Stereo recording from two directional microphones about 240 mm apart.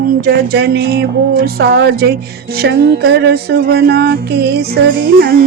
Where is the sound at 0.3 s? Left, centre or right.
Right.